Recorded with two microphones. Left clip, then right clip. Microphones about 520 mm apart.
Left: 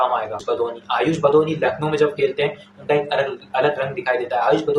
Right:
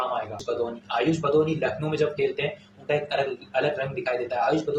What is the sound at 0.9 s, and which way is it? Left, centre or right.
Speech, right.